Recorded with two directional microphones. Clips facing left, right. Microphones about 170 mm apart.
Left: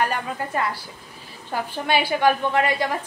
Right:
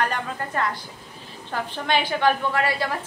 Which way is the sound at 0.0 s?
10° left (ahead or behind).